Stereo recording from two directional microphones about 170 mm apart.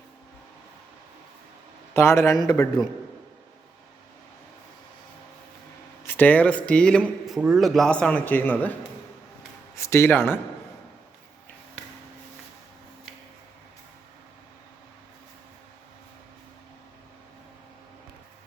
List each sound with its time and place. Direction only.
1.9 s speech: 15° left (ahead or behind)
6.1 s a man's voice: 10° left (ahead or behind)